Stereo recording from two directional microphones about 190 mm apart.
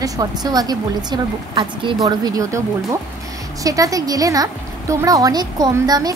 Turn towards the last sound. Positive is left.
turn(degrees=-20)  # may be behind; listen again after turning